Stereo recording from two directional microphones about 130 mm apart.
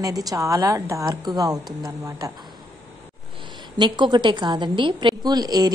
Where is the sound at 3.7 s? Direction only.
35° right (ahead or behind).